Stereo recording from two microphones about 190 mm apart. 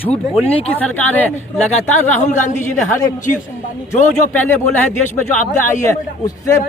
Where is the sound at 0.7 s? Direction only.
10° left (ahead or behind).